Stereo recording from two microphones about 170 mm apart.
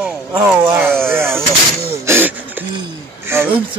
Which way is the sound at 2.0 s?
15° right (ahead or behind).